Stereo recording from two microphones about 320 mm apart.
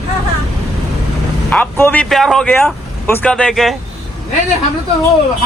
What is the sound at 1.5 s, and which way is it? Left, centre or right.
Speech, centre.